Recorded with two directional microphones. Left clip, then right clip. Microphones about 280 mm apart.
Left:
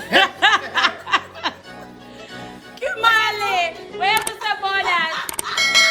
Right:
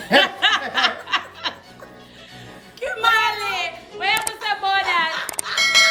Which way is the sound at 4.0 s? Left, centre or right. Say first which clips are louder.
Left 2 dB; centre.